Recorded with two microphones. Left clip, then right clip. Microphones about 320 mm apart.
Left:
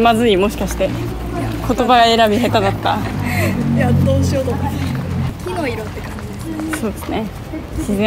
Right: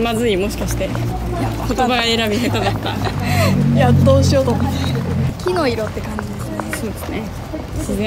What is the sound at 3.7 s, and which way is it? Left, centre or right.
Speech, right.